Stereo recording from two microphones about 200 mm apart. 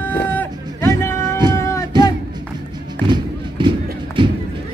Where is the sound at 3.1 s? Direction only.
25° right (ahead or behind).